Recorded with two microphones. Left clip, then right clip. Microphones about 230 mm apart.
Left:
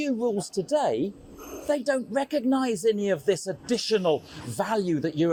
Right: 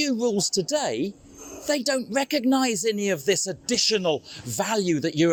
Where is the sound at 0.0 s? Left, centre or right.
Right.